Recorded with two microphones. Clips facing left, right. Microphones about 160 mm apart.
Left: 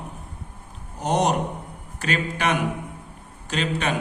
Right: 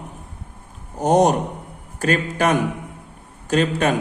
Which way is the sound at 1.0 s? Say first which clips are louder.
Right 6 dB; 45° right (ahead or behind).